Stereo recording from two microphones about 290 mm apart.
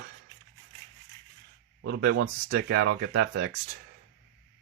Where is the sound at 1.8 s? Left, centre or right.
Right.